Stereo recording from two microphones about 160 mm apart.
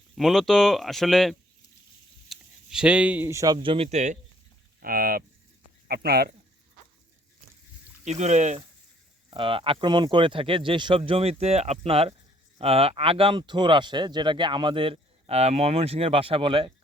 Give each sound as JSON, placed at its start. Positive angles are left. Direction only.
{"t": 0.2, "sound": "speech", "side_deg": 0}
{"t": 3.9, "sound": "speech", "side_deg": -45}
{"t": 4.8, "sound": "speech", "side_deg": -65}
{"t": 5.9, "sound": "speech", "side_deg": -75}
{"t": 8.0, "sound": "speech", "side_deg": -45}
{"t": 9.3, "sound": "speech", "side_deg": -35}